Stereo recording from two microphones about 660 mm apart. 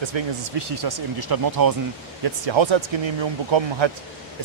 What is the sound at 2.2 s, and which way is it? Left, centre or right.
Speech, right.